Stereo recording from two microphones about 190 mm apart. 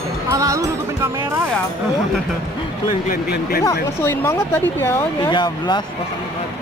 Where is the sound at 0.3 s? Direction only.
15° right (ahead or behind).